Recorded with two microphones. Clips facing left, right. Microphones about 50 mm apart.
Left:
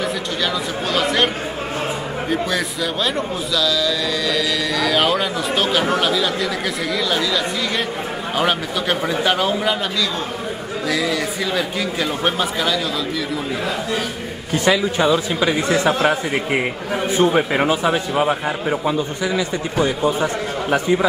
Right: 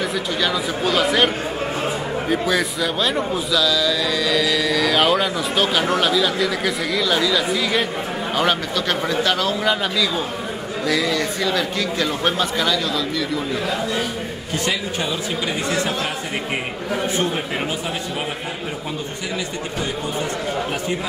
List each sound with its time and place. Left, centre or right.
0.4 s a man's voice: centre
10.9 s speech: centre
17.3 s a man's voice: left